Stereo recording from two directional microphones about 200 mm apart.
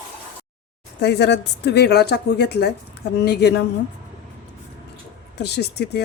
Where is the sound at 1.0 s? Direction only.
55° left (ahead or behind).